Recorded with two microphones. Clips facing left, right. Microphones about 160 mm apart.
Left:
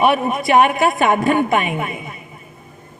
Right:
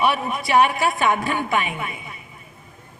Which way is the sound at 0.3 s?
45° left (ahead or behind).